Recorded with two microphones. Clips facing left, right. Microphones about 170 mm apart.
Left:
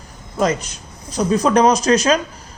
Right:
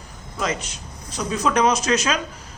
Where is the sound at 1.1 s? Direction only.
40° left (ahead or behind).